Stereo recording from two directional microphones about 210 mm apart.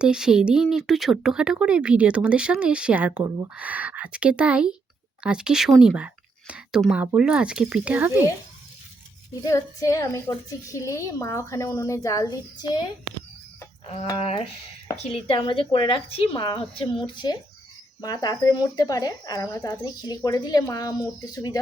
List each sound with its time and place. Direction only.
0.0 s speech: 5° right (ahead or behind)
9.4 s speech: 15° left (ahead or behind)
13.8 s speech: 30° left (ahead or behind)